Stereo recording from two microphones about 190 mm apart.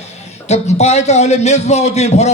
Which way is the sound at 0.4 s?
35° left (ahead or behind).